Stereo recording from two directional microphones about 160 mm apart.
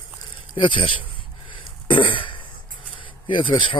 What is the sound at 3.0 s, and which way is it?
Speech, 30° left (ahead or behind).